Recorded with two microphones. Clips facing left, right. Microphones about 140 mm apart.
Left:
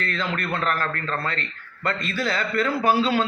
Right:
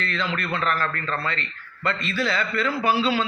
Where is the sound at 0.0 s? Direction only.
45° left (ahead or behind).